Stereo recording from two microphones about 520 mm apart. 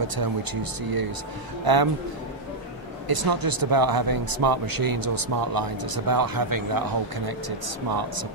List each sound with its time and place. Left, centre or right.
0.1 s a man's voice: right
3.1 s speech: right